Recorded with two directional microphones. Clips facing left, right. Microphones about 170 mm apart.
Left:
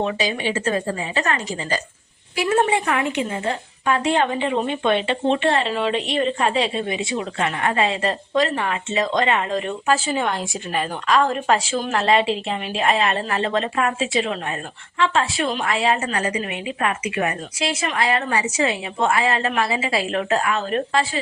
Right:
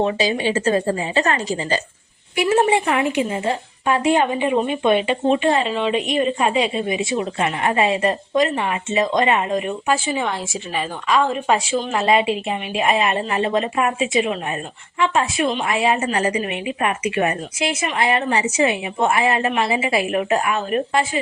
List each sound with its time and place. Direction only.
0.0 s a woman's voice: 30° right (ahead or behind); by 16.1 s 15° right (ahead or behind)
16.1 s a woman's voice: 25° right (ahead or behind)